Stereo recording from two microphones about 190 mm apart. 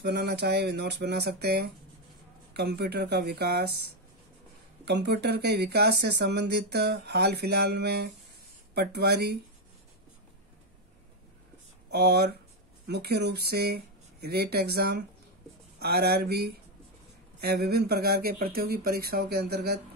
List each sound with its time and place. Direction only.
0.0 s speech: 60° right (ahead or behind)
11.9 s speech: 55° right (ahead or behind)